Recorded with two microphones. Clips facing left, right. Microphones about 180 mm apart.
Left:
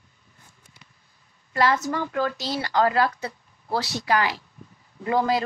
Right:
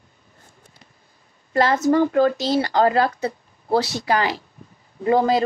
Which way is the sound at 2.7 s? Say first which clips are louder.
Even; 25° right (ahead or behind).